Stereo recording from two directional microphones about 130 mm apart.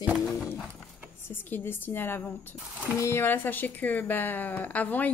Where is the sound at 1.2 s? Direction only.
15° left (ahead or behind).